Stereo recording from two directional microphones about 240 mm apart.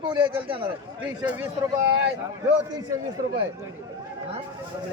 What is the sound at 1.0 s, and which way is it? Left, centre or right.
Speech, centre.